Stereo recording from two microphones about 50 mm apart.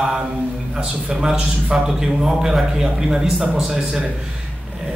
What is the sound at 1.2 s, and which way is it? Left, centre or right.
A man's voice, centre.